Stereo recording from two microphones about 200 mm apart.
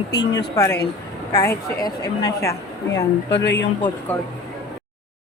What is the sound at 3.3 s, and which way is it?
Speech, 60° left (ahead or behind).